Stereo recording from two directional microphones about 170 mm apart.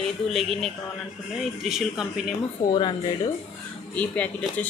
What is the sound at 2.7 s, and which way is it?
Speech, 30° left (ahead or behind).